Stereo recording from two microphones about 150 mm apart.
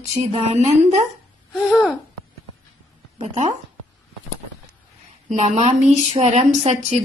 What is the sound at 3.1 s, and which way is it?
Speech, 45° right (ahead or behind).